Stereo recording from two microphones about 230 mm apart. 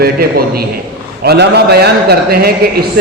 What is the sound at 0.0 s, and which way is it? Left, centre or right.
A man's voice, right.